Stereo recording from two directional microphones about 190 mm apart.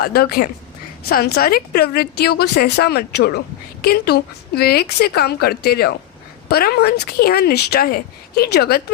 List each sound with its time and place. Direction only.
0.0 s a woman's voice: 55° left (ahead or behind)